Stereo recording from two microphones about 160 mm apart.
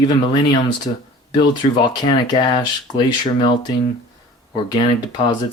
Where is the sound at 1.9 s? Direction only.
25° left (ahead or behind).